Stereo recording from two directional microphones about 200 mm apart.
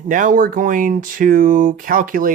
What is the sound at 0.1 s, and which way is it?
Speech, 40° right (ahead or behind).